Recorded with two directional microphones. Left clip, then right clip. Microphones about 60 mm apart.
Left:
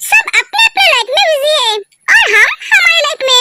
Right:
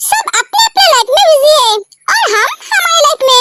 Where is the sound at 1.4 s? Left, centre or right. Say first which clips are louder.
Right 4 dB; right.